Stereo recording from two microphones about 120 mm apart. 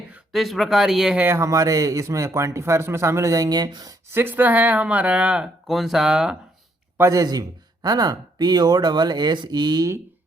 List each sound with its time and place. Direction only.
0.1 s speech: centre (ahead or behind)
1.2 s a man's voice: 20° right (ahead or behind)
4.1 s speech: 20° right (ahead or behind)
6.9 s speech: 25° right (ahead or behind)